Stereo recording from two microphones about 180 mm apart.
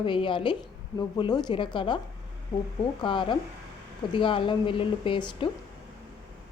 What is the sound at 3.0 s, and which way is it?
Speech, 25° left (ahead or behind).